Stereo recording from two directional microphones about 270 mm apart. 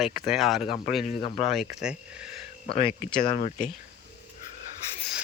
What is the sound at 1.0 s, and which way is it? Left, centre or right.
Speech, left.